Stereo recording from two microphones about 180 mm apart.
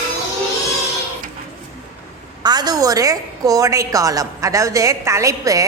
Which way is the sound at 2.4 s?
25° right (ahead or behind).